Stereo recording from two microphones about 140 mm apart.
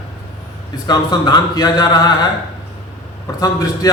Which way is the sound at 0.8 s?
30° left (ahead or behind).